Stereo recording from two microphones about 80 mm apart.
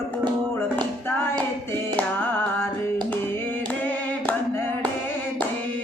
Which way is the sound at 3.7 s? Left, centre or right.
Left.